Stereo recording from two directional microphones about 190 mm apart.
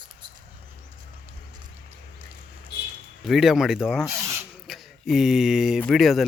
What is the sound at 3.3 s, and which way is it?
Speech, centre (ahead or behind).